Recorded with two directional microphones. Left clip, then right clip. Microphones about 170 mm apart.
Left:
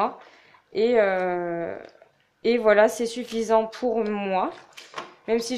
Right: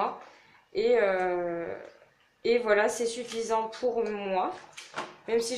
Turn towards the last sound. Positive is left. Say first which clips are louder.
# left 3 dB
turn(degrees=50)  # may be behind; listen again after turning